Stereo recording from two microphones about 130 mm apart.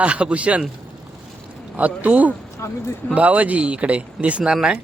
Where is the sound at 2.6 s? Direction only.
20° left (ahead or behind).